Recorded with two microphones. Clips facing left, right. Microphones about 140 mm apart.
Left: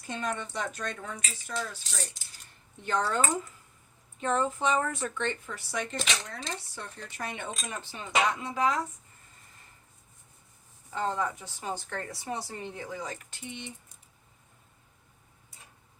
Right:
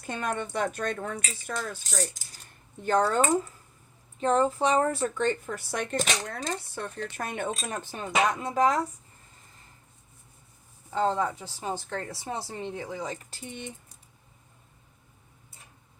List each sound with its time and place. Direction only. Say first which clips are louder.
0.1 s speech: right 3 dB; 55° right (ahead or behind)
4.2 s speech: right 4 dB; 35° right (ahead or behind)
10.9 s a woman's voice: right 4 dB; 30° right (ahead or behind)
13.3 s speech: right 2 dB; 40° right (ahead or behind)